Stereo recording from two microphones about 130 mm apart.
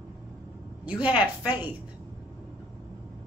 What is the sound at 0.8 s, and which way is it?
Speech, 10° right (ahead or behind).